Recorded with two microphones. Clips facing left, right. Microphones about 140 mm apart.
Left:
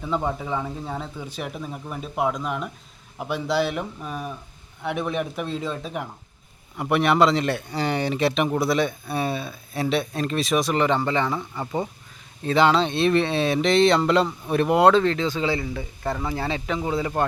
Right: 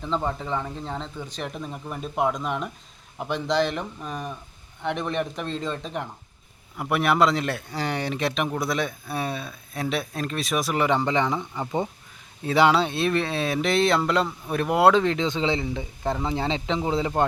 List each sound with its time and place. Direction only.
0.0 s speech: 10° left (ahead or behind)
14.9 s speech: 15° right (ahead or behind)